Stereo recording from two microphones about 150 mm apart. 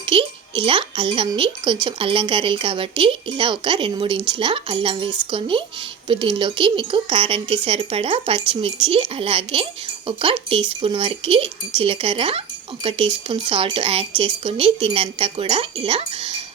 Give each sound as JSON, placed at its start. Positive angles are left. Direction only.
{"t": 0.1, "sound": "a woman's voice", "side_deg": -35}